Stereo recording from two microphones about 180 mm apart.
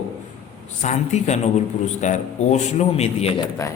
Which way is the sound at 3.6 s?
20° left (ahead or behind).